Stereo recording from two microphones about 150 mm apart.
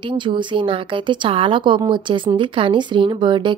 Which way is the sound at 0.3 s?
35° right (ahead or behind).